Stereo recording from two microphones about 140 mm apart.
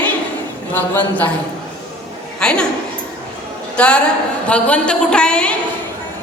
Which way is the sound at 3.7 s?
10° left (ahead or behind).